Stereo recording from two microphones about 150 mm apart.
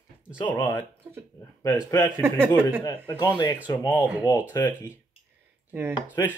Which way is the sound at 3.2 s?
25° left (ahead or behind).